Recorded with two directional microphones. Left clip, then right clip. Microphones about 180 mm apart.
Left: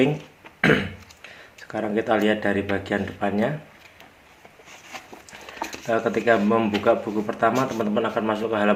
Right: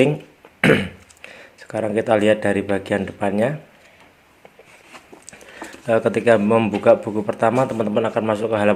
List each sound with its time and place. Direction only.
0.6 s speech: 30° right (ahead or behind)
5.8 s a man's voice: 35° right (ahead or behind)